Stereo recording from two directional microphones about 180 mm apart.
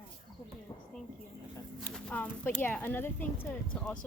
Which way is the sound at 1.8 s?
5° left (ahead or behind).